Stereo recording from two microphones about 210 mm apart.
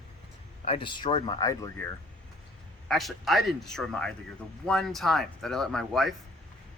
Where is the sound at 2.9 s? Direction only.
Centre (ahead or behind).